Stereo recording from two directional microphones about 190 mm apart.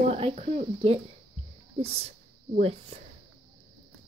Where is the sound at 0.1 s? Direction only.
30° right (ahead or behind).